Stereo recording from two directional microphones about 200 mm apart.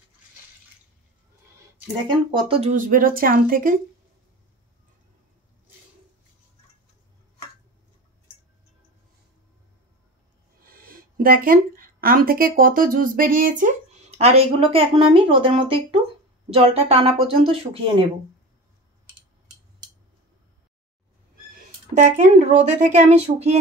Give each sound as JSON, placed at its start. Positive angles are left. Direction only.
{"t": 2.0, "sound": "speech", "side_deg": -25}
{"t": 2.7, "sound": "speech", "side_deg": -40}
{"t": 10.9, "sound": "speech", "side_deg": -45}
{"t": 21.9, "sound": "speech", "side_deg": -35}